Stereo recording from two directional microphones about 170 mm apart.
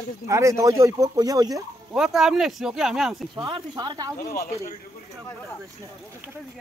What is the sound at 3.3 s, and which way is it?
Speech, 25° right (ahead or behind).